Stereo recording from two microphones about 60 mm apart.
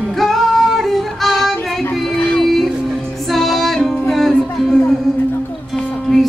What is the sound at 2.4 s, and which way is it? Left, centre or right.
Music, centre.